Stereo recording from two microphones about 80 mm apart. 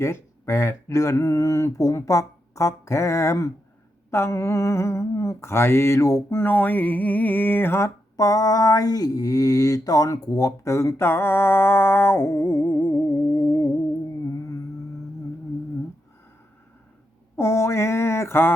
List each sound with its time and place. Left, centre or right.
0.0 s mantra: left
6.4 s a sound: left
8.1 s mantra: left
14.3 s music: left
17.3 s mantra: left